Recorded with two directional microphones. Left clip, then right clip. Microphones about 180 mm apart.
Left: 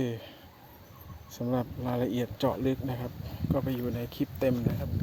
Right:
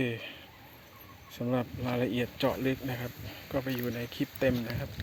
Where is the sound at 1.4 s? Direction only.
10° left (ahead or behind).